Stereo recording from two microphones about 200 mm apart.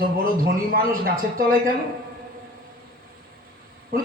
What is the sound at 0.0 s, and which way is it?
Speech, 45° right (ahead or behind).